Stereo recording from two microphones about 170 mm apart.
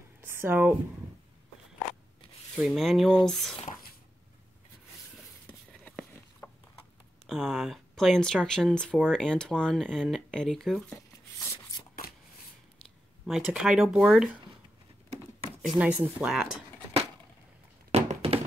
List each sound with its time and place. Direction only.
0.2 s speech: 10° right (ahead or behind)
2.5 s speech: centre (ahead or behind)
5.5 s a sound: 5° left (ahead or behind)
7.2 s speech: centre (ahead or behind)
11.3 s a sound: 20° left (ahead or behind)
13.3 s speech: 5° right (ahead or behind)
15.6 s speech: 5° right (ahead or behind)
17.9 s thunk: 35° right (ahead or behind)